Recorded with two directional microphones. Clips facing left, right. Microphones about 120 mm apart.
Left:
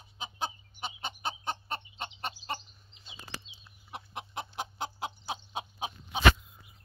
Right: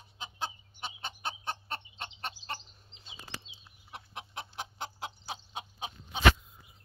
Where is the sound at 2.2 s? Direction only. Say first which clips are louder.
Left 3 dB; 5° left (ahead or behind).